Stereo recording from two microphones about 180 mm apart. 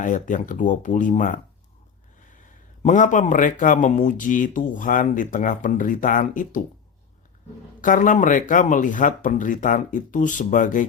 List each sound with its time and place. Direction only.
0.0 s speech: 45° left (ahead or behind)
2.8 s speech: 45° left (ahead or behind)
7.8 s speech: 45° left (ahead or behind)